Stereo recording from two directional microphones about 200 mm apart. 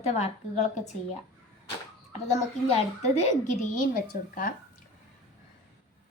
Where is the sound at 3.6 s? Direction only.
45° left (ahead or behind).